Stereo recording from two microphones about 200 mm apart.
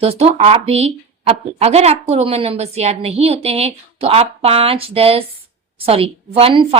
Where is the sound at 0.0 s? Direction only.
30° right (ahead or behind).